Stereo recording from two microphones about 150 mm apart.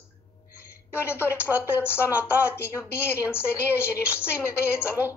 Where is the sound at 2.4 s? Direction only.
15° left (ahead or behind).